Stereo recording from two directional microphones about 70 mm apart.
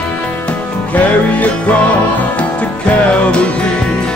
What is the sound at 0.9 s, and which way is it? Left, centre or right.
Music, left.